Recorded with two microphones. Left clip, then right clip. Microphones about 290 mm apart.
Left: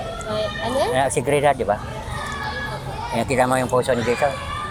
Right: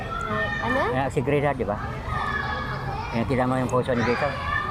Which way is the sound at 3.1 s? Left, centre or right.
Left.